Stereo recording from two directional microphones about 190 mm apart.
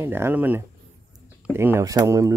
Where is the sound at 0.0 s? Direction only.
10° right (ahead or behind).